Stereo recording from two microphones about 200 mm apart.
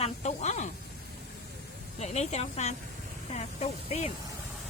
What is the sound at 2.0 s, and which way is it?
Speech, 35° left (ahead or behind).